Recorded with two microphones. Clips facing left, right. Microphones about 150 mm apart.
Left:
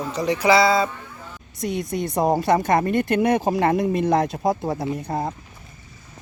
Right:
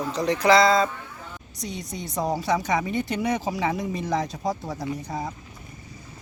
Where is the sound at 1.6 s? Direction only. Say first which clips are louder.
Left 9 dB; 55° left (ahead or behind).